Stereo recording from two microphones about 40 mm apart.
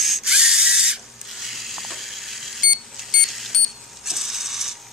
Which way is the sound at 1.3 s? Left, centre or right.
Centre.